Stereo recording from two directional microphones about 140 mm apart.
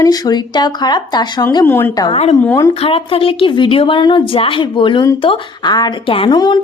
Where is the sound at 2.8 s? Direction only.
40° left (ahead or behind).